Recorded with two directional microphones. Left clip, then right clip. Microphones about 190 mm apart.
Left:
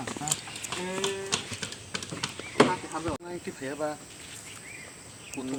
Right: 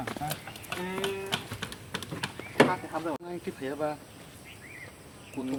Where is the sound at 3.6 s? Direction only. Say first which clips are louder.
Even; 30° right (ahead or behind).